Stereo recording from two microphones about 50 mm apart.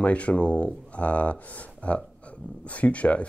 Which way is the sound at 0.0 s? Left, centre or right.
Left.